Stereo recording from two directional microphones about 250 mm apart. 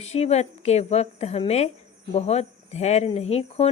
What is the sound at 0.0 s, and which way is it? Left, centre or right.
Speech, left.